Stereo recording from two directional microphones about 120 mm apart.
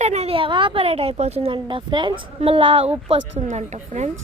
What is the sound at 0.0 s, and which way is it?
Speech, 65° right (ahead or behind).